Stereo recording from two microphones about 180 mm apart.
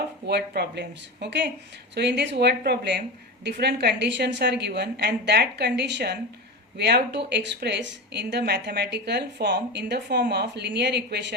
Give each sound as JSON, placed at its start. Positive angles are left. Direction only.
{"t": 0.3, "sound": "a woman's voice", "side_deg": -65}